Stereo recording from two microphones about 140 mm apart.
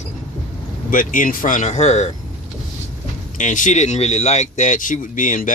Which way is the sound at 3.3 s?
65° left (ahead or behind).